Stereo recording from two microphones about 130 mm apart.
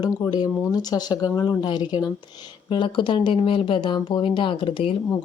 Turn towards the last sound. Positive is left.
turn(degrees=40)  # may be behind; listen again after turning